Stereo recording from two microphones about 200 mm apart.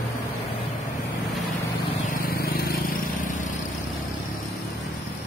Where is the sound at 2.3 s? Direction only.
50° left (ahead or behind).